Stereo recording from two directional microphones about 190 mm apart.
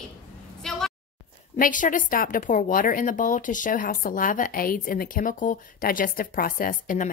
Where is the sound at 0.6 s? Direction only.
Centre (ahead or behind).